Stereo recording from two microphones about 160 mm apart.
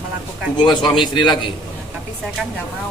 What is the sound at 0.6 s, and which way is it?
Speech, 25° left (ahead or behind).